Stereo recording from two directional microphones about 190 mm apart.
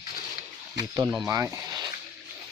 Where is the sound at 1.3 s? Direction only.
15° right (ahead or behind).